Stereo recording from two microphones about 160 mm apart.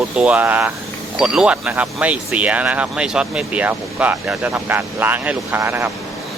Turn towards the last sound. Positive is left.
turn(degrees=-15)  # may be behind; listen again after turning